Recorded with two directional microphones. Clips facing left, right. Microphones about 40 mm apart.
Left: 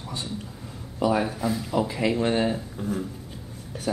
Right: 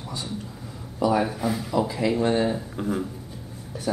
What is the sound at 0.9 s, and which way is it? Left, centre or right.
Speech, left.